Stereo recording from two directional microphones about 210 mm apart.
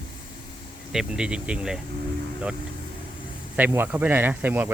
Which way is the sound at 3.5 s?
10° right (ahead or behind).